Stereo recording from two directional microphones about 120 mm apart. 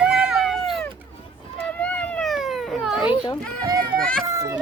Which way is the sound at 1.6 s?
10° left (ahead or behind).